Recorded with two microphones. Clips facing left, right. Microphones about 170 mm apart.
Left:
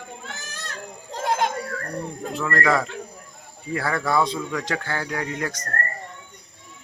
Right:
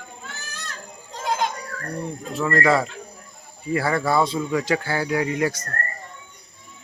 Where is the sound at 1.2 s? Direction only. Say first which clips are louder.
Left 1 dB; 55° left (ahead or behind).